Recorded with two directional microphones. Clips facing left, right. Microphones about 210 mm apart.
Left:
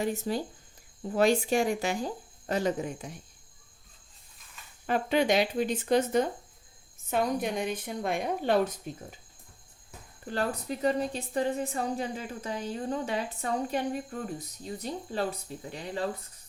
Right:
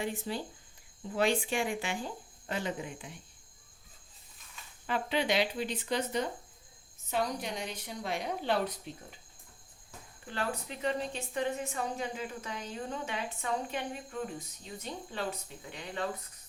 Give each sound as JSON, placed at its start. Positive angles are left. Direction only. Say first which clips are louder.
{"t": 0.0, "sound": "a woman's voice", "louder": "left 5 dB", "side_deg": 40}
{"t": 4.9, "sound": "a woman's voice", "louder": "left 6 dB", "side_deg": 45}
{"t": 10.2, "sound": "a woman's voice", "louder": "left 5 dB", "side_deg": 40}